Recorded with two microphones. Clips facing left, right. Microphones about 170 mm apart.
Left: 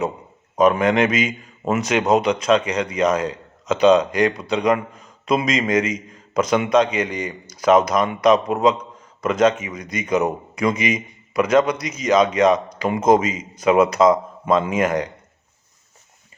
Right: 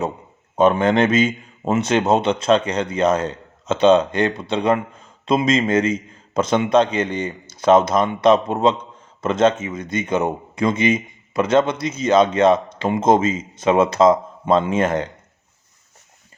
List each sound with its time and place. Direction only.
0.5 s a man's voice: 30° right (ahead or behind)